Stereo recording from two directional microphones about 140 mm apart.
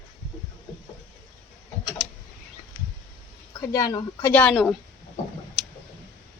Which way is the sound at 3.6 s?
25° left (ahead or behind).